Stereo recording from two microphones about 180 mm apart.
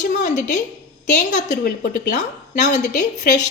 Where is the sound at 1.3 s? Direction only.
45° left (ahead or behind).